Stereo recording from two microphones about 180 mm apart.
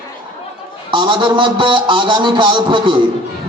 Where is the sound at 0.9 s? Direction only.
25° right (ahead or behind).